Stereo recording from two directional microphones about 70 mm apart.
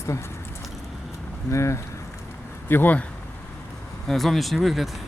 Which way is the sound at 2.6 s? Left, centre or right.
Left.